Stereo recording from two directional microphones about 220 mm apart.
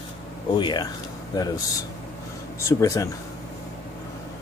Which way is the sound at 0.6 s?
20° left (ahead or behind).